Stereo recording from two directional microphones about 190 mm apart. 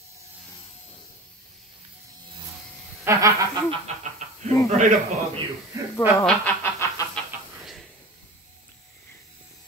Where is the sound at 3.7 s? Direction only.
40° right (ahead or behind).